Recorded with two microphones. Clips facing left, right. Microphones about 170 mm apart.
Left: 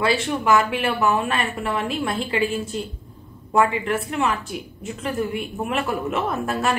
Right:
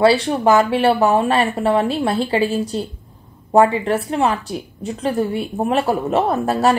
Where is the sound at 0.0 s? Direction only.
35° right (ahead or behind).